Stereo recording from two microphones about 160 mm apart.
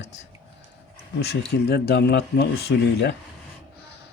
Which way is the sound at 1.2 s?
90° left.